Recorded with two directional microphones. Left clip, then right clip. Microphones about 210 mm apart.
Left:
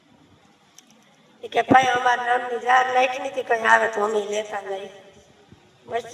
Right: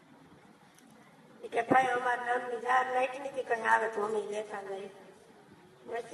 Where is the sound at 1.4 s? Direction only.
50° left (ahead or behind).